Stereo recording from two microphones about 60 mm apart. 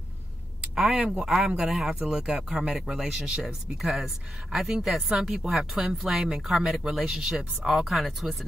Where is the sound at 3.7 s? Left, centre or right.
Centre.